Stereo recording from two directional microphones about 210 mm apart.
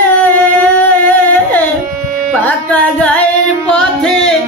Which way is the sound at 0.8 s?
10° left (ahead or behind).